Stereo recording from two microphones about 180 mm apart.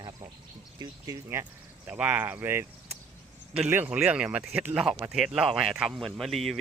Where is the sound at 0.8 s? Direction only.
20° right (ahead or behind).